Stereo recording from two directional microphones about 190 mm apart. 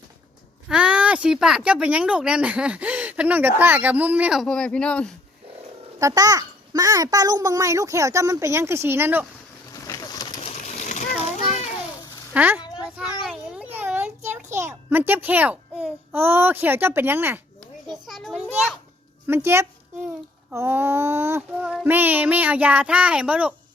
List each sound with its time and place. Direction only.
0.7 s speech: 5° right (ahead or behind)
6.0 s speech: 20° right (ahead or behind)
9.8 s pigeon: 20° left (ahead or behind)
10.4 s splash: 40° left (ahead or behind)
12.3 s a child's voice: 10° right (ahead or behind)
13.2 s a sound: centre (ahead or behind)
14.3 s a child's voice: 10° right (ahead or behind)
18.0 s children playing: centre (ahead or behind)
19.3 s speech: 15° right (ahead or behind)